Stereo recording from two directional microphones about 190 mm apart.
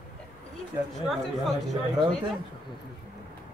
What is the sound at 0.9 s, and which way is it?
Speech, centre (ahead or behind).